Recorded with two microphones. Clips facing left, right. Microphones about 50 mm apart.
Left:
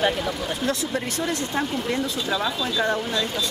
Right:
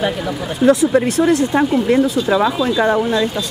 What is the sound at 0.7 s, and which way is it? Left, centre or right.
Speech, centre.